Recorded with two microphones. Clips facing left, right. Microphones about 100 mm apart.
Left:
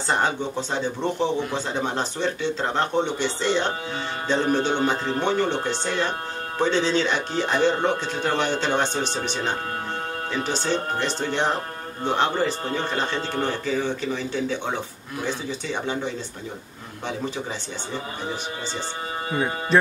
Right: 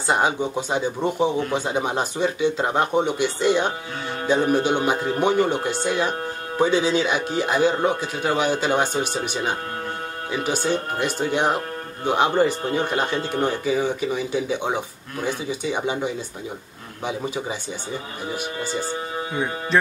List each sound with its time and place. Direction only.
0.0 s speech: 10° right (ahead or behind)
18.3 s speech: 10° right (ahead or behind)
19.3 s speech: centre (ahead or behind)